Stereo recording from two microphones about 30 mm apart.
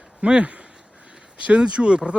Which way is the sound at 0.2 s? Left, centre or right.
Right.